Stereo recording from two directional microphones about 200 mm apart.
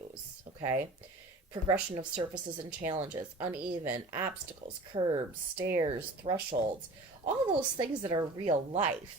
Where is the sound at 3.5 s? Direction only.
10° right (ahead or behind).